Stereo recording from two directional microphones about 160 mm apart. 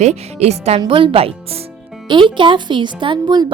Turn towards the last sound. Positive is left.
turn(degrees=-30)  # may be behind; listen again after turning